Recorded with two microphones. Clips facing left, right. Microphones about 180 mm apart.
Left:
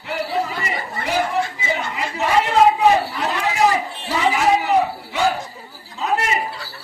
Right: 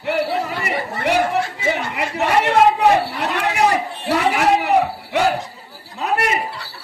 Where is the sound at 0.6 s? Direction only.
65° right (ahead or behind).